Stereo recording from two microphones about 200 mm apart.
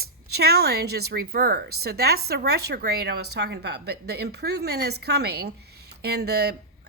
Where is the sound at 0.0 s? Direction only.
50° right (ahead or behind).